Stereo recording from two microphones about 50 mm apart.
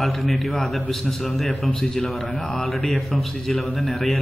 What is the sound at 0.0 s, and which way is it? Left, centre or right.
A man's voice, centre.